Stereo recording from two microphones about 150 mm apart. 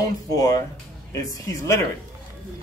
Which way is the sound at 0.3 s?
20° left (ahead or behind).